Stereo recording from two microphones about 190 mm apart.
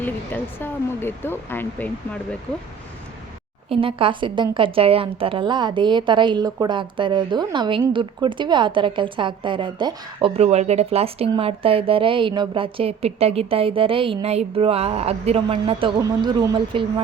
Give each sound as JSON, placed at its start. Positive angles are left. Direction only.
{"t": 0.0, "sound": "speech", "side_deg": 10}
{"t": 3.7, "sound": "speech", "side_deg": -30}